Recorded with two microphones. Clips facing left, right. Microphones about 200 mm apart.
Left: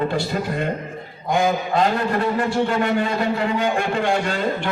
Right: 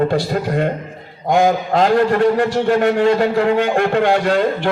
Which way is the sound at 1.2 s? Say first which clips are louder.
Right 6 dB; 45° right (ahead or behind).